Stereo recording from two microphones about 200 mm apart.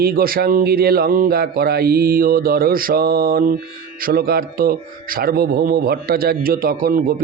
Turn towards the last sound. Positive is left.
turn(degrees=-45)  # may be behind; listen again after turning